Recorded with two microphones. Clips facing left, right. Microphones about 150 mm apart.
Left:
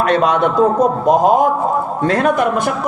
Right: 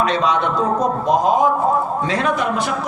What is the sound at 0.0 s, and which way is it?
A woman's voice, 55° left (ahead or behind).